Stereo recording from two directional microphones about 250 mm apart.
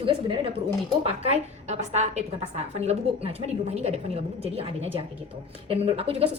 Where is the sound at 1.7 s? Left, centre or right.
Right.